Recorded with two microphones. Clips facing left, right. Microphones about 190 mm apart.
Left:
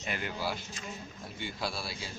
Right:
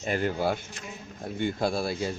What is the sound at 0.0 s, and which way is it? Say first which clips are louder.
A man's voice: right 9 dB; 45° right (ahead or behind).